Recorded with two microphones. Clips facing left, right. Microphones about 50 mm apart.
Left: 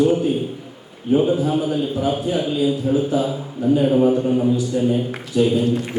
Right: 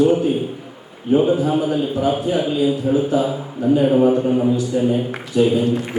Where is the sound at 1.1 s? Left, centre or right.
Right.